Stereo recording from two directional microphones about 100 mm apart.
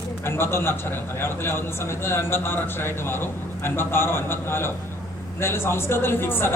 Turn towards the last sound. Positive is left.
turn(degrees=20)  # may be behind; listen again after turning